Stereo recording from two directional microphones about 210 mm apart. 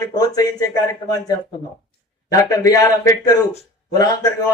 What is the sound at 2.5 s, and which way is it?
Speech, 15° left (ahead or behind).